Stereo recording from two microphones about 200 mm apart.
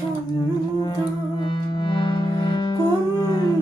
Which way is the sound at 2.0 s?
25° left (ahead or behind).